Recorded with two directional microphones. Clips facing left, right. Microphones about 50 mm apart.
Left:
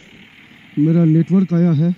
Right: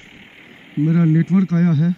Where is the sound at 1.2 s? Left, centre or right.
Right.